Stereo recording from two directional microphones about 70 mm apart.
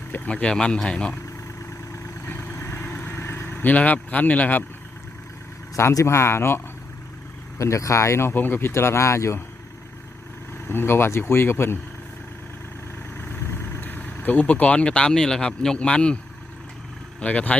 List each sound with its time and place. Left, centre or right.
0.3 s speech: centre
2.2 s vehicle: left
2.7 s vehicle: left
3.2 s speech: left
6.1 s speech: left
7.6 s speech: left
10.7 s speech: left
13.3 s speech: left; by 16.1 s centre
17.2 s speech: centre